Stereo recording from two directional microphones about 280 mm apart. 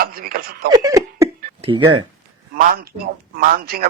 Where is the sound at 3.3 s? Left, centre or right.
Right.